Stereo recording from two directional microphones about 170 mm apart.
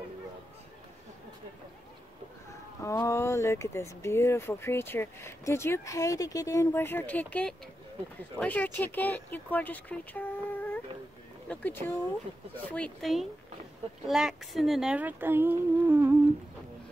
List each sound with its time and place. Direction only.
2.8 s speech: 20° left (ahead or behind); by 16.2 s 10° right (ahead or behind)